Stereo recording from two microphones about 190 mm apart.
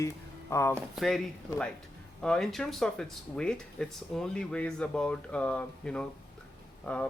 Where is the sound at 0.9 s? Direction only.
Centre (ahead or behind).